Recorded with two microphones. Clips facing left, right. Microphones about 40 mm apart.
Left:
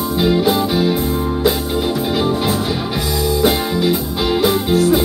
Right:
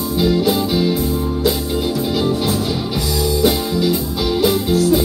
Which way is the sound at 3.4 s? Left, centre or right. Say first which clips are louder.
Left 1 dB; left.